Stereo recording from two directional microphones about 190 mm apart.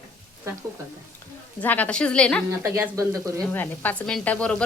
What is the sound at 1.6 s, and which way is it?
Speech, 10° left (ahead or behind).